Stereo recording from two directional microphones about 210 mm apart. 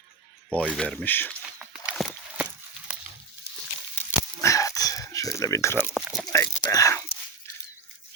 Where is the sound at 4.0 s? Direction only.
15° left (ahead or behind).